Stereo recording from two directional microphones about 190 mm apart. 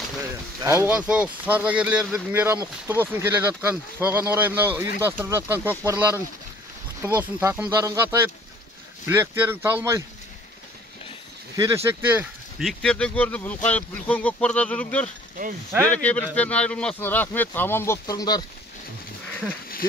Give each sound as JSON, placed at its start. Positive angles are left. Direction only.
{"t": 0.7, "sound": "speech", "side_deg": -10}
{"t": 11.5, "sound": "speech", "side_deg": -15}